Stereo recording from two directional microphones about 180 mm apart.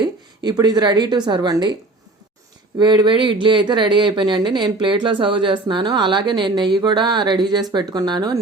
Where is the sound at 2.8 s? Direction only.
25° right (ahead or behind).